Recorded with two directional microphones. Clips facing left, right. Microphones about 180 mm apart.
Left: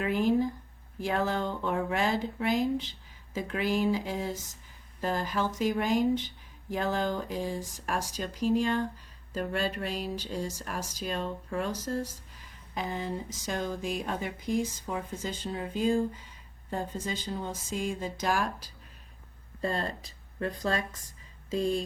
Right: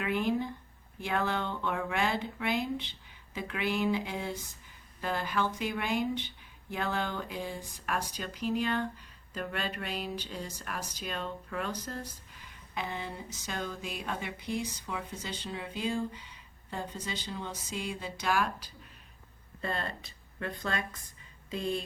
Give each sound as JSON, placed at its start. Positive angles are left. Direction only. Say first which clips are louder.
{"t": 0.0, "sound": "speech", "louder": "left 4 dB", "side_deg": 40}